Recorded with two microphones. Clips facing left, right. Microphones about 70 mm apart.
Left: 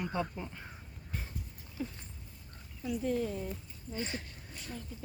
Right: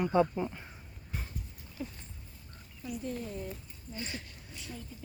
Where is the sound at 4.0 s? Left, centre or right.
Left.